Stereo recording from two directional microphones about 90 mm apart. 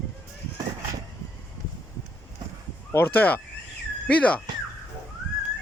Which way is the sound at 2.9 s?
20° left (ahead or behind).